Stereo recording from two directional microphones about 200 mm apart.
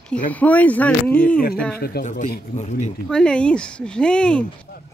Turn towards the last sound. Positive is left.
turn(degrees=5)  # may be behind; listen again after turning